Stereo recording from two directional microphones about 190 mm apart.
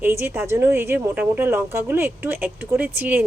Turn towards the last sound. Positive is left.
turn(degrees=-10)  # may be behind; listen again after turning